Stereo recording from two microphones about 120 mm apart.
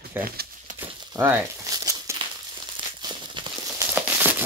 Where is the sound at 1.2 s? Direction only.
35° right (ahead or behind).